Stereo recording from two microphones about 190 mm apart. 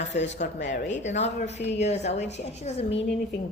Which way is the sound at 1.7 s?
35° left (ahead or behind).